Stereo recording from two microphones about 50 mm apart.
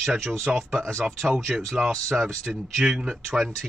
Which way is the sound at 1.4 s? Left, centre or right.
Centre.